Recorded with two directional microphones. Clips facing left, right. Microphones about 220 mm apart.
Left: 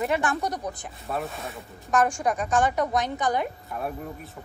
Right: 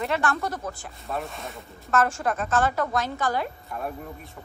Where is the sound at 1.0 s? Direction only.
Centre (ahead or behind).